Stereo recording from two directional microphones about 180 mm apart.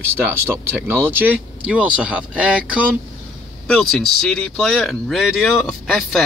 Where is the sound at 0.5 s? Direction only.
10° right (ahead or behind).